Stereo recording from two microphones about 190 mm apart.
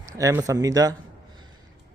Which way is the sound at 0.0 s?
15° right (ahead or behind).